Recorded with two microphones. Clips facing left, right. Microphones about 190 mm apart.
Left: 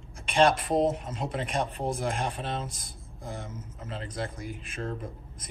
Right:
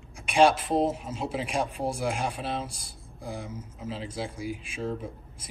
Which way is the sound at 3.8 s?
5° right (ahead or behind).